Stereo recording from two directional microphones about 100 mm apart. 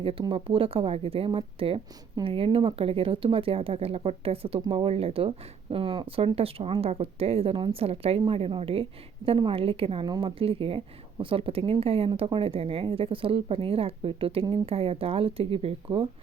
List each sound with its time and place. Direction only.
0.0 s a woman's voice: 65° right (ahead or behind)
5.7 s a woman's voice: 60° right (ahead or behind)
6.8 s a woman's voice: 80° right
8.3 s a woman's voice: 65° right (ahead or behind)